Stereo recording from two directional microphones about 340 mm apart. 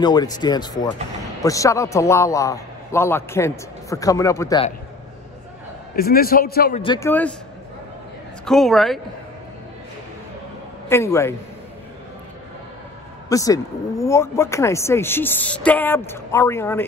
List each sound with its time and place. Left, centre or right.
0.0 s speech: centre
5.9 s a man's voice: left
6.8 s speech: centre
8.5 s speech: centre
10.9 s speech: centre
13.3 s speech: centre